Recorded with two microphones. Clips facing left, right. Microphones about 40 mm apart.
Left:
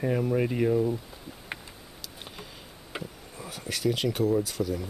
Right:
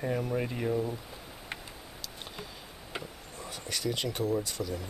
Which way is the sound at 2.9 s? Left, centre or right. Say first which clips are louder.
Left 2 dB; centre.